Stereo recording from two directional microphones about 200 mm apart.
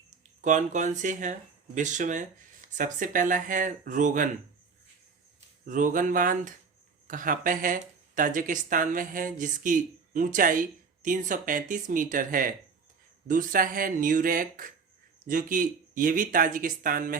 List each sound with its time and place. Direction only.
0.4 s speech: 40° right (ahead or behind)
5.6 s speech: 40° right (ahead or behind)